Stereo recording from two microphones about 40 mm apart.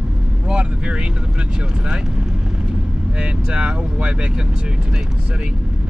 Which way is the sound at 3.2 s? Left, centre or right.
Right.